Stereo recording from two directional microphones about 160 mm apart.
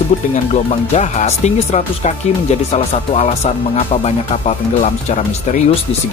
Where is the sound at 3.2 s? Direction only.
40° left (ahead or behind).